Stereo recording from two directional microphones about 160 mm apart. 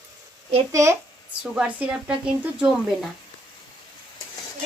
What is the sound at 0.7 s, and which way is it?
Speech, 20° right (ahead or behind).